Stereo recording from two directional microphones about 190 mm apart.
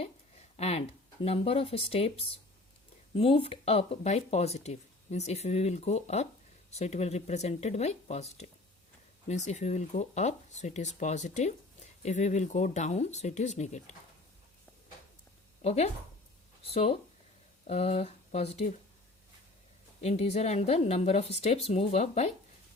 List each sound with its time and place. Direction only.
0.0 s speech: 35° left (ahead or behind)
15.6 s speech: 35° left (ahead or behind)
20.0 s speech: 35° left (ahead or behind)